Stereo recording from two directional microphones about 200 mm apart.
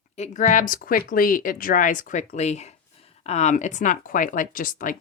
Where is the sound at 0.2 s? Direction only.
40° left (ahead or behind).